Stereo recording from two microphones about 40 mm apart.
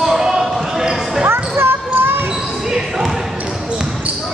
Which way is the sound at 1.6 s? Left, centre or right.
Right.